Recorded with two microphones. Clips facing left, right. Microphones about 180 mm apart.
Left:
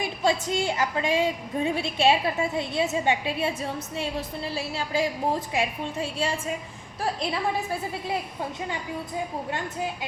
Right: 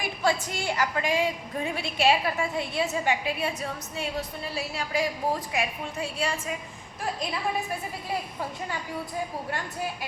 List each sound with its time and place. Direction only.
0.0 s a woman's voice: 20° left (ahead or behind)
4.5 s a woman's voice: 30° left (ahead or behind)